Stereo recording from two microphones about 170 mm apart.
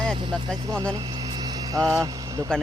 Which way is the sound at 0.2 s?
30° right (ahead or behind).